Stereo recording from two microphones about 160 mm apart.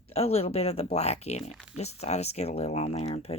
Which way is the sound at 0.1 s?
40° left (ahead or behind).